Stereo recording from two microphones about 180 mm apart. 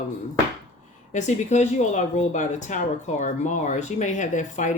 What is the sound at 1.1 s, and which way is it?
Speech, 40° left (ahead or behind).